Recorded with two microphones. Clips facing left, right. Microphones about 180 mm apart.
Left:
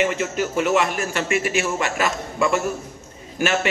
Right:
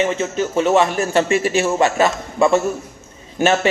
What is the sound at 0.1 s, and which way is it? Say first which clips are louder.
A man's voice: right 3 dB; 25° right (ahead or behind).